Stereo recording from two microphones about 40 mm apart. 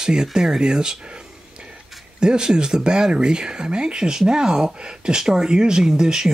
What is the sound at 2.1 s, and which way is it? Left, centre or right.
Speech, centre.